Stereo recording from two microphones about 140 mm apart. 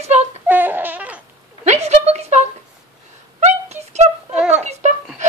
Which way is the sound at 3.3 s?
50° right (ahead or behind).